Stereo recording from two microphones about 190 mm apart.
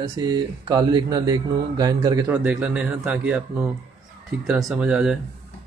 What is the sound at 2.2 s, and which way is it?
Speech, 10° right (ahead or behind).